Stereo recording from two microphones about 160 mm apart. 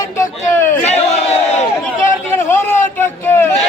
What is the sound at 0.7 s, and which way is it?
Crowd, 45° left (ahead or behind).